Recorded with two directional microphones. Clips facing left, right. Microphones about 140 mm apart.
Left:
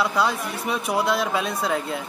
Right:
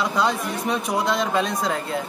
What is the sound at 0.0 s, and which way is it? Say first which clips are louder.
Speech: even; 5° left (ahead or behind).